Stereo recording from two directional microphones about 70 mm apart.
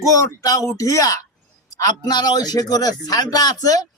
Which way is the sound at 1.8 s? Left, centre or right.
Left.